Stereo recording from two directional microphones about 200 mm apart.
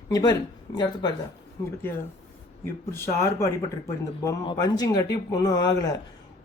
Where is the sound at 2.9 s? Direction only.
15° left (ahead or behind).